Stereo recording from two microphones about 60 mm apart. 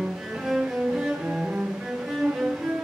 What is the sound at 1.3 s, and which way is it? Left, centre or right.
Cello, right.